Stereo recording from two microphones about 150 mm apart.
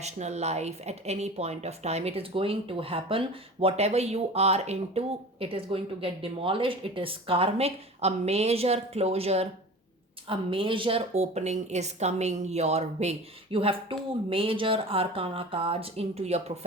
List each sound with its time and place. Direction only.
0.0 s speech: 50° right (ahead or behind)